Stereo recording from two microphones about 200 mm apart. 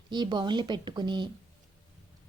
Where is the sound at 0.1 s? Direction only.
20° right (ahead or behind).